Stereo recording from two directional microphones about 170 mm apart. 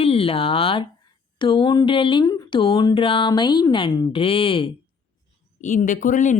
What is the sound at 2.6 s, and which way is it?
Speech, 30° left (ahead or behind).